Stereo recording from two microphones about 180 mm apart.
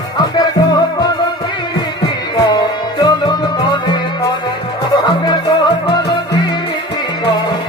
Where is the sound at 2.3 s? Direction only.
25° left (ahead or behind).